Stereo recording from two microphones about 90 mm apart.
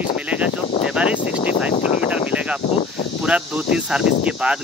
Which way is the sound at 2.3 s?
15° right (ahead or behind).